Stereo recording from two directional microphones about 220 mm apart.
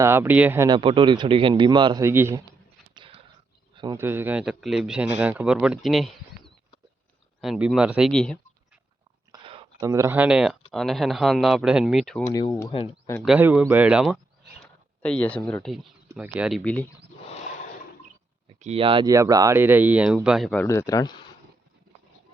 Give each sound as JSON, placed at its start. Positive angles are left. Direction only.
{"t": 0.0, "sound": "speech", "side_deg": -10}
{"t": 0.8, "sound": "speech", "side_deg": -25}
{"t": 2.9, "sound": "a sound", "side_deg": -20}
{"t": 3.8, "sound": "speech", "side_deg": -15}
{"t": 9.3, "sound": "a sound", "side_deg": -20}
{"t": 10.7, "sound": "speech", "side_deg": 0}
{"t": 12.3, "sound": "speech", "side_deg": 15}
{"t": 13.2, "sound": "speech", "side_deg": -5}
{"t": 14.6, "sound": "a sound", "side_deg": 5}
{"t": 15.4, "sound": "speech", "side_deg": 5}
{"t": 18.4, "sound": "speech", "side_deg": -25}